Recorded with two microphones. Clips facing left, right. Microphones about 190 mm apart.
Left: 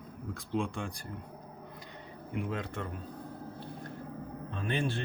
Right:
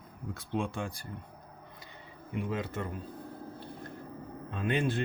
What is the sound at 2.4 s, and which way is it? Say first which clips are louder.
Speech: right 2 dB; 5° right (ahead or behind).